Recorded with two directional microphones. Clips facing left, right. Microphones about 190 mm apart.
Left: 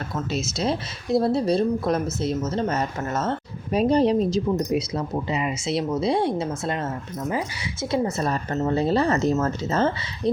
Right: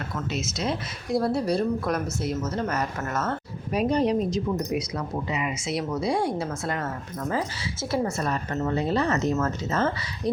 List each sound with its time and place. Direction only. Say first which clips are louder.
0.3 s speech: left 4 dB; 30° left (ahead or behind)
8.3 s speech: left 3 dB; 30° left (ahead or behind)